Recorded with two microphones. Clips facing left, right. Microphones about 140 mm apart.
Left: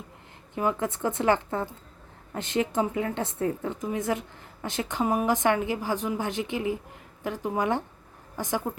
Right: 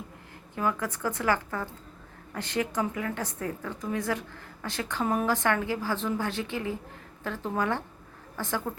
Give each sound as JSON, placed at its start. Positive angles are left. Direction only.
{"t": 0.5, "sound": "a woman's voice", "side_deg": 20}